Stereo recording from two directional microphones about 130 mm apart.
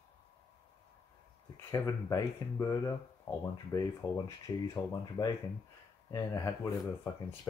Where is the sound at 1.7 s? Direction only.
25° left (ahead or behind).